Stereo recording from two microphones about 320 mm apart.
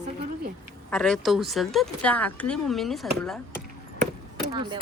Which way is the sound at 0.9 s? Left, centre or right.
Centre.